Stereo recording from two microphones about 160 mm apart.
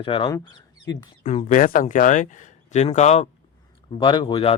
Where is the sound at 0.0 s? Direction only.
30° left (ahead or behind).